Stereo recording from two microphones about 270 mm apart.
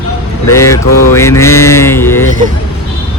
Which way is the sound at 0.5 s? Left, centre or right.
Centre.